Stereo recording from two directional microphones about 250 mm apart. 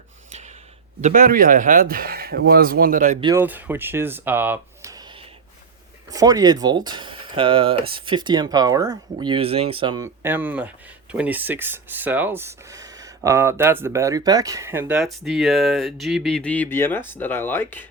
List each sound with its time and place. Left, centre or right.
1.0 s speech: right
3.2 s speech: centre
3.4 s speech: centre